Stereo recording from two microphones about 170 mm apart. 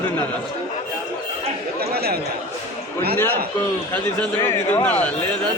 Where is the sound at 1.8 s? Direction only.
65° right (ahead or behind).